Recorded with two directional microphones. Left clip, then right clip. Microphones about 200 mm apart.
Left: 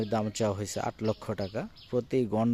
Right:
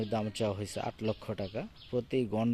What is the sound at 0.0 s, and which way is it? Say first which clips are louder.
Speech: left 4 dB; 15° left (ahead or behind).